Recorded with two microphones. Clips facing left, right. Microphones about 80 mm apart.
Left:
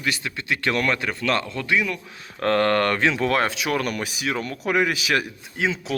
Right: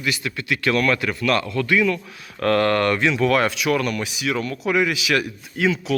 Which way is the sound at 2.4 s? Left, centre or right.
Left.